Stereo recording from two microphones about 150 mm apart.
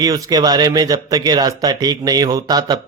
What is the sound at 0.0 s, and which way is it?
A man's voice, 25° right (ahead or behind).